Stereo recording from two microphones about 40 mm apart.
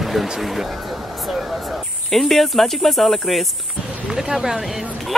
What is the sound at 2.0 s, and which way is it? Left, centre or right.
Speech, centre.